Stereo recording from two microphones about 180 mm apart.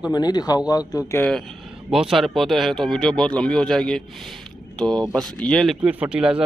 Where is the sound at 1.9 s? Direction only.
Centre (ahead or behind).